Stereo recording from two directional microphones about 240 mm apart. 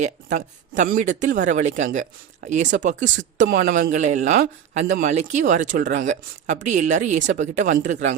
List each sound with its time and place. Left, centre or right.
0.0 s speech: right